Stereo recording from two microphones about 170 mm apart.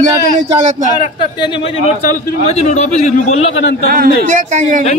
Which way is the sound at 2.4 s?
40° left (ahead or behind).